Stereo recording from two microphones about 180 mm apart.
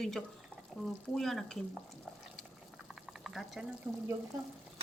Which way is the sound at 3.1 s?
Centre (ahead or behind).